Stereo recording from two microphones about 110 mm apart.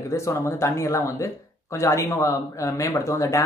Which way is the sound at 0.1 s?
25° left (ahead or behind).